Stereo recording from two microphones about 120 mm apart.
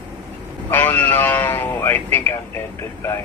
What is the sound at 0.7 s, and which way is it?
Speech, 15° left (ahead or behind).